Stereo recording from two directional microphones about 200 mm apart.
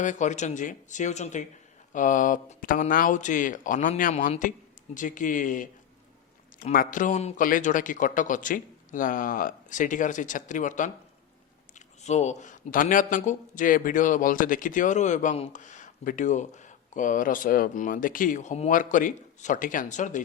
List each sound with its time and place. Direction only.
0.0 s a man's voice: 40° left (ahead or behind)
12.0 s a man's voice: 35° left (ahead or behind)